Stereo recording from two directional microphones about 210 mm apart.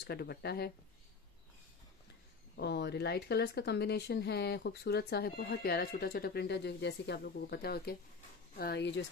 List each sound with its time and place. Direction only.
0.0 s speech: 50° left (ahead or behind)
2.5 s speech: 55° left (ahead or behind)